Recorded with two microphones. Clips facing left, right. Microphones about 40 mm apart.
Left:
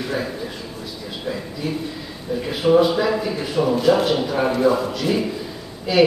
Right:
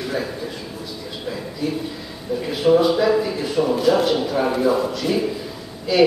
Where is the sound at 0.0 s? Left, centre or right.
Centre.